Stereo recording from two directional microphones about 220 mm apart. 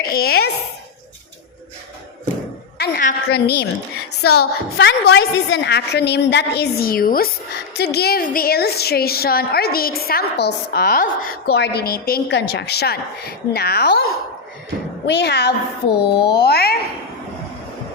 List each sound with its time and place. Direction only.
0.0 s a child's voice: 45° left (ahead or behind)
2.7 s a woman's voice: 45° left (ahead or behind)
4.1 s speech: 90° left
4.8 s a woman's voice: 50° left (ahead or behind)